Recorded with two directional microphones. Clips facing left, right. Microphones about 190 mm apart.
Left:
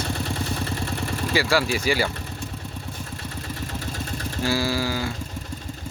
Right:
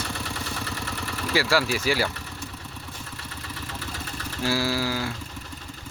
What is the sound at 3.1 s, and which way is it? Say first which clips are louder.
Vehicle: left 5 dB; 45° left (ahead or behind).